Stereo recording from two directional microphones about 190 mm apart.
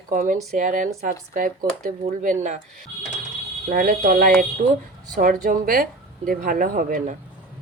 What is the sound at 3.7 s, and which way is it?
Speech, 45° right (ahead or behind).